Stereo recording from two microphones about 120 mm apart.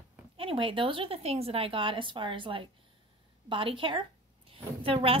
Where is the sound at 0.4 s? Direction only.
50° right (ahead or behind).